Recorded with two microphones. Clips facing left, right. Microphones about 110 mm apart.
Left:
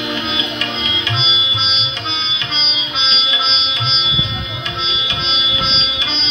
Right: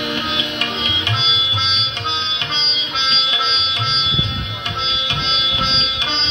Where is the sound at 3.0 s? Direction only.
60° right (ahead or behind).